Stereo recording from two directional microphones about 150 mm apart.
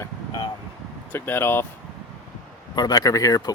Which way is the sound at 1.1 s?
15° left (ahead or behind).